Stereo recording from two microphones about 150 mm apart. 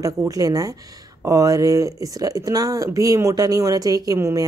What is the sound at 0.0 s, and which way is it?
Speech, 25° right (ahead or behind).